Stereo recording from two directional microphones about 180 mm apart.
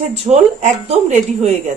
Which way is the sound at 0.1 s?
40° right (ahead or behind).